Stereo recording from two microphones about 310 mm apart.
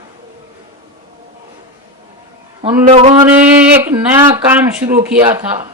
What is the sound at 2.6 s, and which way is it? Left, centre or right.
Speech, centre.